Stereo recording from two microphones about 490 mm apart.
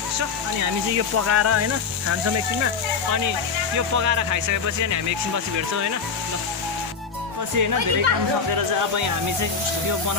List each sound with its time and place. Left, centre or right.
0.9 s speech: right
7.5 s speech: right